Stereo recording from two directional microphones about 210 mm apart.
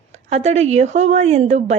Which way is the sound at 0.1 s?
30° right (ahead or behind).